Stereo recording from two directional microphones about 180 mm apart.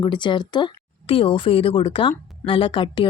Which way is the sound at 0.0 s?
25° left (ahead or behind).